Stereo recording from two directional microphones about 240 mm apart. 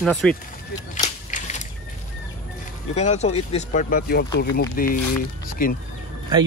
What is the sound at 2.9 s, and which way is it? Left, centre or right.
Speech, left.